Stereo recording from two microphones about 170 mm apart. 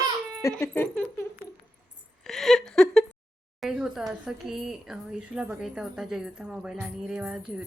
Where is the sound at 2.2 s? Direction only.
Centre (ahead or behind).